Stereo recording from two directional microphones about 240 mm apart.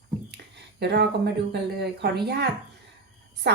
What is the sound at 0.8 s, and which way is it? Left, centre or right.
A woman's voice, right.